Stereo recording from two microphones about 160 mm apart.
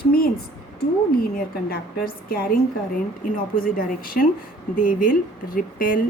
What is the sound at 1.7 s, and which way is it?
Speech, 70° left (ahead or behind).